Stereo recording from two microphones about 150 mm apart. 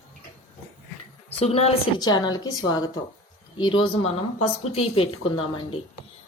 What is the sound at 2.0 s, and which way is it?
Speech, 30° left (ahead or behind).